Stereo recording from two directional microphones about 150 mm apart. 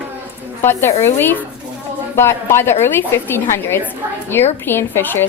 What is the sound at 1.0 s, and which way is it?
Speech, 15° left (ahead or behind).